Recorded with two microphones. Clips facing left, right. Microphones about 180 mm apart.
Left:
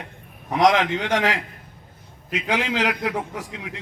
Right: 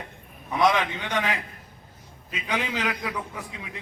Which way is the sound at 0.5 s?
75° left (ahead or behind).